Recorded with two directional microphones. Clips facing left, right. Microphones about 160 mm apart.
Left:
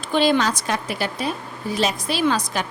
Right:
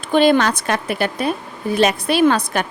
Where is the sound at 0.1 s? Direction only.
55° right (ahead or behind).